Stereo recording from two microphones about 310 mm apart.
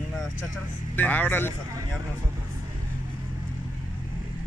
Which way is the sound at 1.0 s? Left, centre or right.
Centre.